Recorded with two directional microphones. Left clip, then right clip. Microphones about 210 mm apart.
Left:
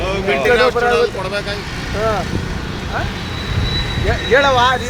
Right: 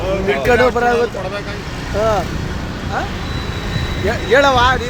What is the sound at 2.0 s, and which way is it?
Speech, 45° right (ahead or behind).